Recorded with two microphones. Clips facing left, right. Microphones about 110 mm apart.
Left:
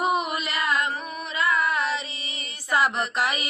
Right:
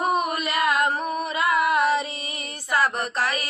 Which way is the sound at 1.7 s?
50° right (ahead or behind).